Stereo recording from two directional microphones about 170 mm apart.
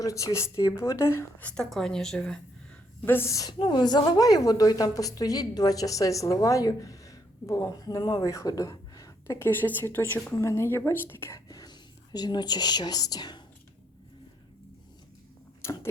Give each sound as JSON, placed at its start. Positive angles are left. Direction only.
{"t": 0.0, "sound": "speech", "side_deg": 20}
{"t": 3.1, "sound": "a woman's voice", "side_deg": 15}
{"t": 15.6, "sound": "tick-tock", "side_deg": 15}